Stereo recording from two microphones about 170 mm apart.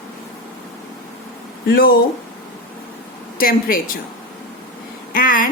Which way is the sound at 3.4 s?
60° left (ahead or behind).